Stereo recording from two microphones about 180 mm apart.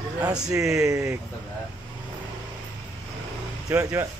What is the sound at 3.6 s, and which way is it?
Speech, 15° right (ahead or behind).